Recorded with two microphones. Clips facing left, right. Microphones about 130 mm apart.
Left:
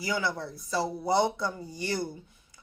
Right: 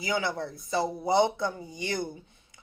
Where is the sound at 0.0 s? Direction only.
20° right (ahead or behind).